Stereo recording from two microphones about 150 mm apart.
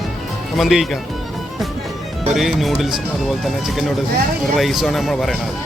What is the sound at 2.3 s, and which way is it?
Speech, centre (ahead or behind).